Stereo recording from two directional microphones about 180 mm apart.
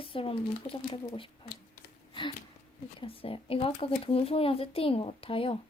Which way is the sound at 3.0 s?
30° left (ahead or behind).